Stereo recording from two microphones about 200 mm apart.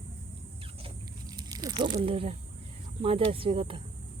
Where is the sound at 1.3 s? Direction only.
20° right (ahead or behind).